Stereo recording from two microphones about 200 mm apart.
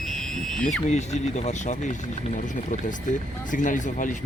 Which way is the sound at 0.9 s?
35° left (ahead or behind).